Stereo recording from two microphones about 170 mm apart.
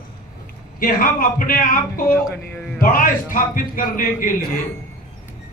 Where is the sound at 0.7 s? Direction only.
55° left (ahead or behind).